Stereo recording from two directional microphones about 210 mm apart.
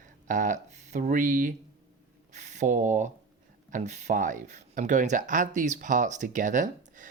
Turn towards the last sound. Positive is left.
turn(degrees=-35)  # may be behind; listen again after turning